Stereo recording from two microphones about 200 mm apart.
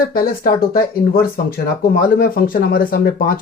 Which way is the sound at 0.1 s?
45° left (ahead or behind).